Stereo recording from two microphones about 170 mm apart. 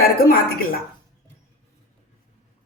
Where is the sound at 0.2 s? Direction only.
60° left (ahead or behind).